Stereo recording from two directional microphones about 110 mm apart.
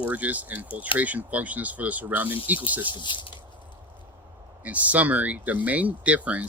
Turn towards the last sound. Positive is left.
turn(degrees=-15)  # may be behind; listen again after turning